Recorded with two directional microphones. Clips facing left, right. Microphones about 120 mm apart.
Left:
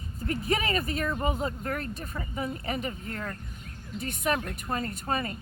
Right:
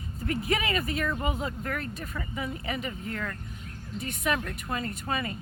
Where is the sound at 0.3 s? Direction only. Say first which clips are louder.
Even; 35° left (ahead or behind).